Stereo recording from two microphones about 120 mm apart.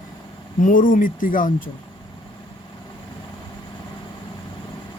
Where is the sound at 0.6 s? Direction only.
90° left.